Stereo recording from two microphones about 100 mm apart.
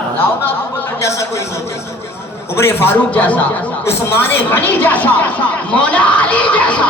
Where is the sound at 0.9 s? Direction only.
30° left (ahead or behind).